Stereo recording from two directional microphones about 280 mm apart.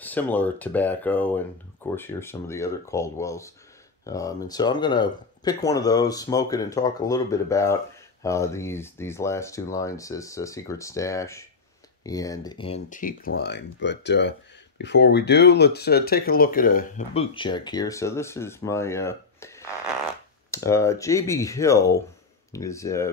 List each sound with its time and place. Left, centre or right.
0.0 s speech: centre